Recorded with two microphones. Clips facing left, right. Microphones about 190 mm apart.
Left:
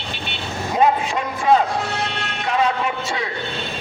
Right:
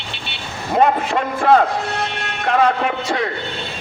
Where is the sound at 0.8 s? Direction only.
60° right (ahead or behind).